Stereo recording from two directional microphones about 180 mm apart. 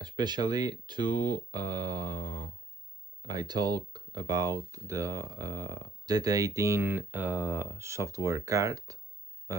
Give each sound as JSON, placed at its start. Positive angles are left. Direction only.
{"t": 0.2, "sound": "speech", "side_deg": -25}